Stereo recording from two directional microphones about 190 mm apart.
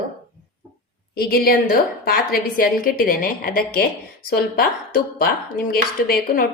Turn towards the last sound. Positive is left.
turn(degrees=50)  # may be behind; listen again after turning